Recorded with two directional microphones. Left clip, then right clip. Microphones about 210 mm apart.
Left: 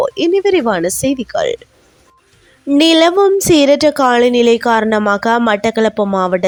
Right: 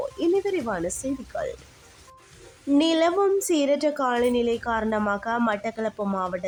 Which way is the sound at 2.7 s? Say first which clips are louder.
Left 11 dB; 40° left (ahead or behind).